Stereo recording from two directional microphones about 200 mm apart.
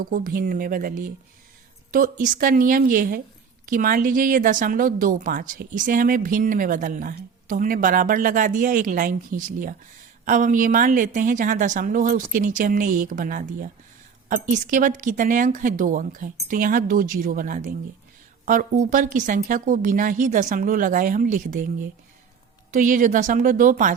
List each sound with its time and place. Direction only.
0.0 s speech: 45° right (ahead or behind)